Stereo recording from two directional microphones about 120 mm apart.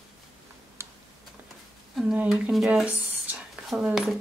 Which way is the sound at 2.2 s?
Centre (ahead or behind).